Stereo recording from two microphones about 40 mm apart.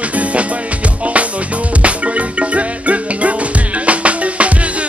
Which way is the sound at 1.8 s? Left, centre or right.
Right.